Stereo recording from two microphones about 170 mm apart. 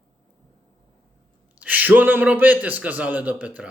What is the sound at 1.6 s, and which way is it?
Speech, 10° right (ahead or behind).